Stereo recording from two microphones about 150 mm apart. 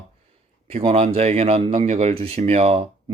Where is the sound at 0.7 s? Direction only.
40° right (ahead or behind).